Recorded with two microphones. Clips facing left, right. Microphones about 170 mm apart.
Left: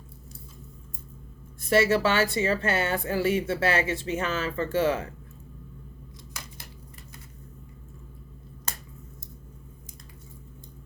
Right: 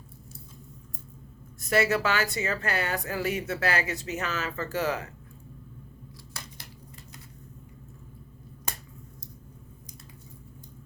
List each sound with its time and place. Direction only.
1.6 s a woman's voice: 30° left (ahead or behind)